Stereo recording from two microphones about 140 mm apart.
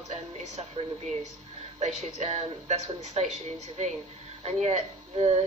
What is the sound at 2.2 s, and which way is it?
Speech, 50° right (ahead or behind).